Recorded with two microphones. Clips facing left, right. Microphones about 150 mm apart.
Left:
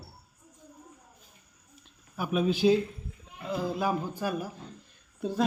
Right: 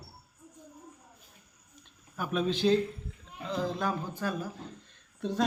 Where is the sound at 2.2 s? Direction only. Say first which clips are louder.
Left 3 dB; 10° left (ahead or behind).